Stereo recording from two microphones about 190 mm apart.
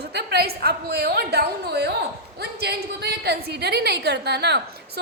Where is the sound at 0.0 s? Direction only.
60° right (ahead or behind).